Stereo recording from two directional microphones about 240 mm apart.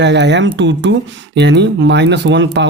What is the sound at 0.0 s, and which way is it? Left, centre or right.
Speech, right.